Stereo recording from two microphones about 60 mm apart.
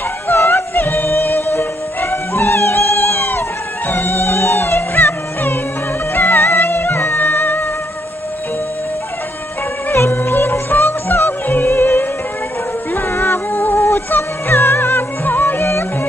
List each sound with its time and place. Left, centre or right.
0.4 s music: left
3.3 s music: left
10.1 s music: left
13.7 s music: left
14.1 s music: left